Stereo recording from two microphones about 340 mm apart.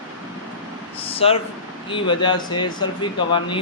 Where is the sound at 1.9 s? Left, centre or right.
Centre.